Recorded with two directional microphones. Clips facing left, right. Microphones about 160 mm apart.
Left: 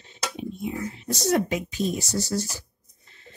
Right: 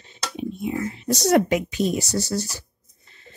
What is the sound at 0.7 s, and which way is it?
Speech, 85° right.